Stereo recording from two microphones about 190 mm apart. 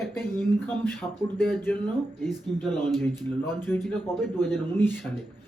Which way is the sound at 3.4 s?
20° right (ahead or behind).